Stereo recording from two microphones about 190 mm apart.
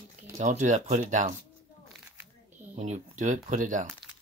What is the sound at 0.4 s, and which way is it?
Speech, 40° right (ahead or behind).